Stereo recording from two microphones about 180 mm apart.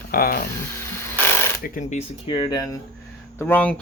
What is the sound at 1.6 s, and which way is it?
Speech, 45° left (ahead or behind).